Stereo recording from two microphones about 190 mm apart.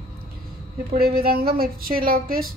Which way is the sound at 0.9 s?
55° right (ahead or behind).